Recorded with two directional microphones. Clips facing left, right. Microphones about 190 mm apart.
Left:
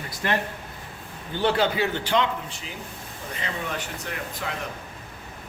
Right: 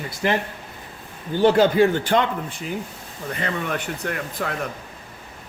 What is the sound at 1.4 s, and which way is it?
Speech, 45° right (ahead or behind).